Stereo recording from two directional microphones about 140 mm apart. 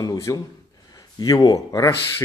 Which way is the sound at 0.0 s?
25° left (ahead or behind).